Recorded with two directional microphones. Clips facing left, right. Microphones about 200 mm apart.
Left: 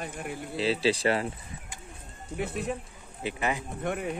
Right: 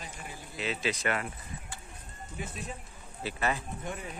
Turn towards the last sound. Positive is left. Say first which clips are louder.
# left 8 dB
turn(degrees=65)  # may be behind; listen again after turning